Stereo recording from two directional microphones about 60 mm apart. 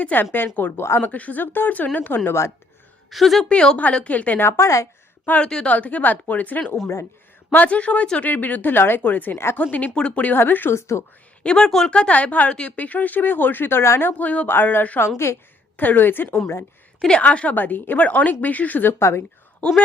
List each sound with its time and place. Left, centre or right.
0.0 s a woman's voice: left
3.1 s a woman's voice: centre
3.5 s a woman's voice: centre
4.4 s speech: left
5.2 s speech: left
8.2 s a woman's voice: left
10.3 s a woman's voice: left
10.8 s speech: left
11.4 s speech: centre; by 14.1 s left
14.1 s a woman's voice: left
15.2 s speech: left
15.8 s a woman's voice: left
17.2 s speech: left